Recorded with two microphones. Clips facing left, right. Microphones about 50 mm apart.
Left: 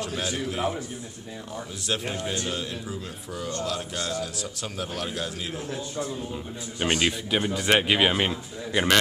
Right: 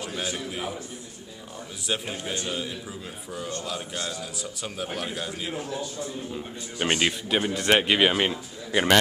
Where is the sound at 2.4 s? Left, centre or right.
Centre.